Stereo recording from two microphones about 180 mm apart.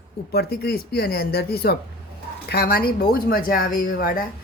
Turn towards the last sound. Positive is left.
turn(degrees=50)  # may be behind; listen again after turning